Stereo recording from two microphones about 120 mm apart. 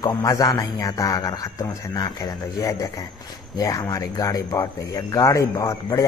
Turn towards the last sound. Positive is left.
turn(degrees=25)  # may be behind; listen again after turning